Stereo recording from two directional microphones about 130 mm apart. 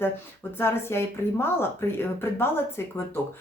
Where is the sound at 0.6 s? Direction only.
20° left (ahead or behind).